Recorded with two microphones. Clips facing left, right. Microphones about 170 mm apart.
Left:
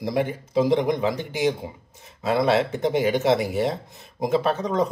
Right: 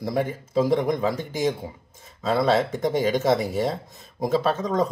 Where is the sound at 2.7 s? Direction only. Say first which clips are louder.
Left 1 dB; 20° left (ahead or behind).